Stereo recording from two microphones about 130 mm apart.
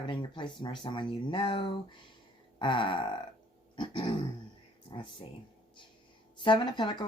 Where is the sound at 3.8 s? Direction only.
35° left (ahead or behind).